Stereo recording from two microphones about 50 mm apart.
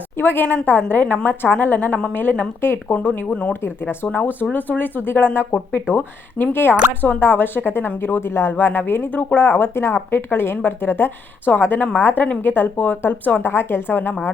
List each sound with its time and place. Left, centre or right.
0.2 s speech: left
8.5 s speech: left
13.4 s speech: left